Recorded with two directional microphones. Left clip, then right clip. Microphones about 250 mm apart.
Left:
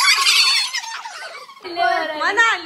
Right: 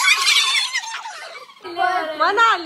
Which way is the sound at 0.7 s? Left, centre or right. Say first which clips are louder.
Right 1 dB; centre.